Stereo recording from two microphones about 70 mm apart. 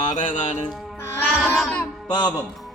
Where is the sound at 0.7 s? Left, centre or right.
Centre.